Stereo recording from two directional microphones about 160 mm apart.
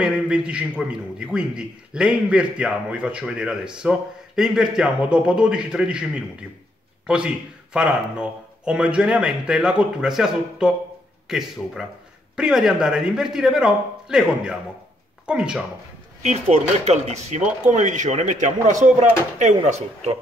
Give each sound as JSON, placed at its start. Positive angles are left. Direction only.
{"t": 0.0, "sound": "a man's voice", "side_deg": -5}
{"t": 16.2, "sound": "speech", "side_deg": -45}